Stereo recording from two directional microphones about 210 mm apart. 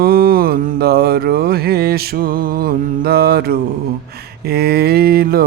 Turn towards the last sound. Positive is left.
turn(degrees=-45)  # may be behind; listen again after turning